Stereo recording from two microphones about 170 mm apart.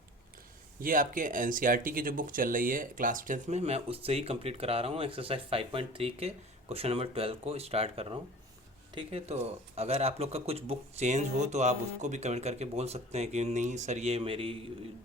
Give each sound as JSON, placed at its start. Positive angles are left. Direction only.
{"t": 0.8, "sound": "speech", "side_deg": -55}